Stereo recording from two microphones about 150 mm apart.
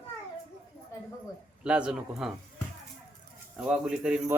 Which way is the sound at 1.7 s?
5° right (ahead or behind).